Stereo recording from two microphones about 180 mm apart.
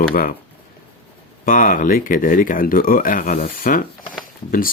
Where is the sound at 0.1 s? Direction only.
50° left (ahead or behind).